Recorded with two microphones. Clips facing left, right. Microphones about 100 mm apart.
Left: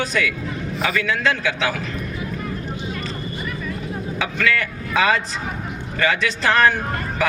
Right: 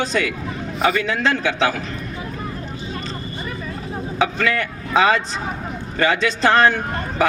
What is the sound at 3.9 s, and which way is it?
A man's voice, 30° right (ahead or behind).